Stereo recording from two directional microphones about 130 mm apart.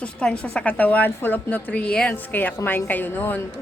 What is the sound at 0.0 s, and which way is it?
A woman's voice, 10° left (ahead or behind).